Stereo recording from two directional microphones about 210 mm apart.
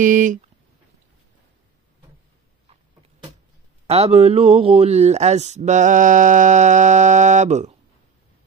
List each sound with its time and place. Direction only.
0.0 s speech: 40° right (ahead or behind)
3.8 s speech: 30° right (ahead or behind)